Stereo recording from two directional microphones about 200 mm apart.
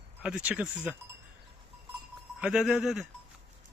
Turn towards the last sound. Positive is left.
turn(degrees=0)  # may be behind; listen again after turning